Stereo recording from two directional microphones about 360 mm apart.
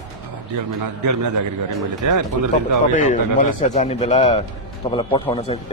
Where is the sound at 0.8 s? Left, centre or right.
Right.